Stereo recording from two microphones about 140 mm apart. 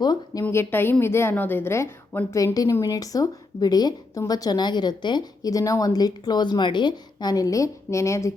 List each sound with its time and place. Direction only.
0.0 s a woman's voice: 30° left (ahead or behind)
0.4 s a woman's voice: 15° left (ahead or behind)